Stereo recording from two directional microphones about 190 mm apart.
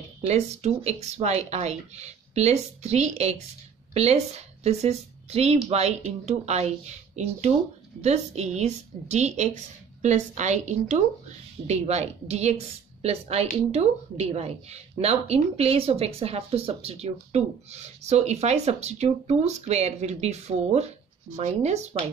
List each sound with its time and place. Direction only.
0.3 s a woman's voice: 35° right (ahead or behind)
8.0 s a woman's voice: 35° right (ahead or behind)